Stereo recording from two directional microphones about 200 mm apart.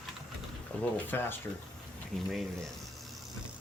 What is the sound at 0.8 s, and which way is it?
Speech, 10° left (ahead or behind).